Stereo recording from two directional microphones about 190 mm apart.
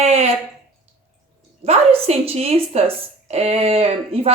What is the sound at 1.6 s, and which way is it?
A woman's voice, 30° right (ahead or behind).